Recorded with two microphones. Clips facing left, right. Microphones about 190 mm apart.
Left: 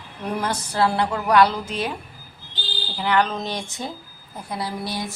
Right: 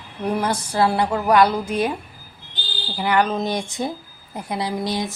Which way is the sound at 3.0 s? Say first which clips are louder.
Right 2 dB; 10° right (ahead or behind).